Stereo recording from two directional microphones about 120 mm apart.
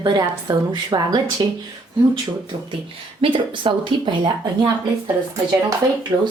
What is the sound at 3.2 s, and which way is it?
Speech, 45° right (ahead or behind).